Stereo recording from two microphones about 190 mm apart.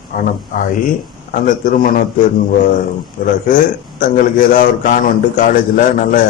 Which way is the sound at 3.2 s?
45° left (ahead or behind).